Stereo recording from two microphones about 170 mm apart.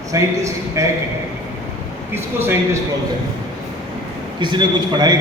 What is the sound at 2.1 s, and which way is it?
Speech, 15° right (ahead or behind).